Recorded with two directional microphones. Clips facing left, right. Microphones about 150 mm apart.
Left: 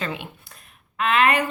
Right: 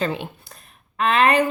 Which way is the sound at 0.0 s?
35° right (ahead or behind).